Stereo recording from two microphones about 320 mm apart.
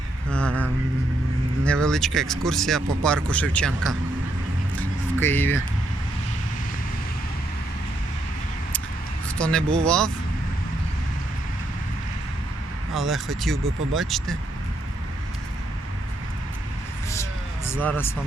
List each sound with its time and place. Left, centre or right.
0.3 s speech: centre
5.2 s speech: centre
9.4 s speech: centre
12.9 s speech: centre
17.7 s speech: centre